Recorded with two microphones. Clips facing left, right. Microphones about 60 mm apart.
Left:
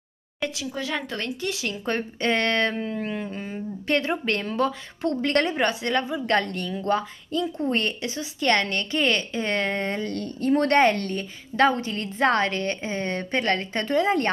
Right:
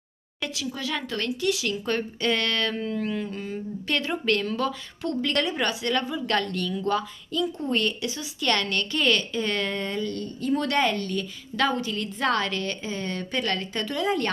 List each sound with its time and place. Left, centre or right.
0.7 s speech: left
10.1 s a woman's voice: left